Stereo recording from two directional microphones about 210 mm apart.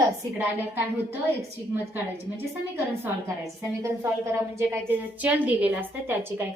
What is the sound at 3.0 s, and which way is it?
A woman's voice, 15° right (ahead or behind).